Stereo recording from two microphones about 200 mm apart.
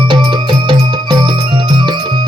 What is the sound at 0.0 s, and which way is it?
Music, 25° right (ahead or behind).